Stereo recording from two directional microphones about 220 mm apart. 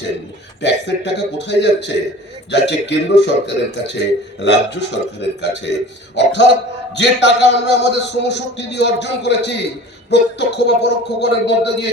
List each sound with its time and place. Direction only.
0.6 s a man's voice: 50° left (ahead or behind)